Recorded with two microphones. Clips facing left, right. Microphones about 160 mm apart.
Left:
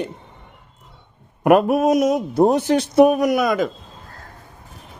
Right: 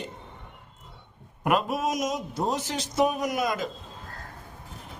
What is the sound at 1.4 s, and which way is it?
Speech, 60° left (ahead or behind).